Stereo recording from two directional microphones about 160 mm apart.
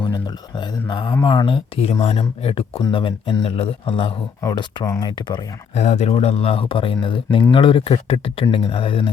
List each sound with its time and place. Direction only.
0.0 s speech: 30° left (ahead or behind)
4.4 s speech: 20° left (ahead or behind)
5.7 s speech: 45° left (ahead or behind)